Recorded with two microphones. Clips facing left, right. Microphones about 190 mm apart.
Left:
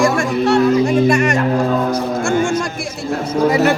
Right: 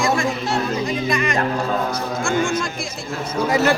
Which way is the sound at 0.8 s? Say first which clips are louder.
Left 8 dB; 50° left (ahead or behind).